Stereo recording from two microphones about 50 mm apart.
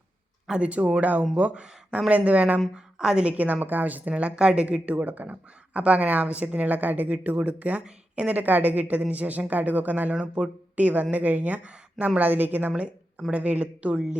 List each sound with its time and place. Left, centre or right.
0.6 s speech: right
1.6 s speech: centre
2.0 s speech: right
2.7 s a woman's voice: centre
3.2 s speech: right
4.1 s a woman's voice: right
8.4 s speech: right
10.2 s speech: right
12.7 s speech: right